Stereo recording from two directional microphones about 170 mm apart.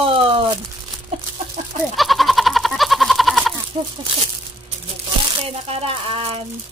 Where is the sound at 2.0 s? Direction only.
Centre (ahead or behind).